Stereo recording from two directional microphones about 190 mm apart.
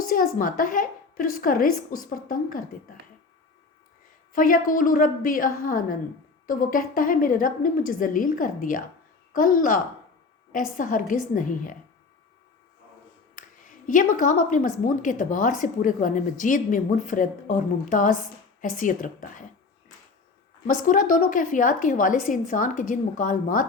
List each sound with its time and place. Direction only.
0.1 s a woman's voice: 45° left (ahead or behind)
4.3 s a woman's voice: 45° left (ahead or behind)
13.3 s a woman's voice: 45° left (ahead or behind)
20.8 s a woman's voice: 45° left (ahead or behind)